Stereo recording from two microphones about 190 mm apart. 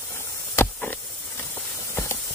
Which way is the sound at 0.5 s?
10° left (ahead or behind).